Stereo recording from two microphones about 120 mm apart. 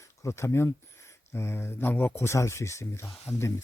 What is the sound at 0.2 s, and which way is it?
A man's voice, 25° left (ahead or behind).